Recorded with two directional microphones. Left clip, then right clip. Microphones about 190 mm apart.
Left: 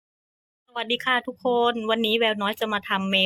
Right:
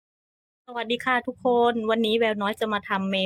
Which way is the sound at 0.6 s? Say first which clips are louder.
Left 1 dB; 5° right (ahead or behind).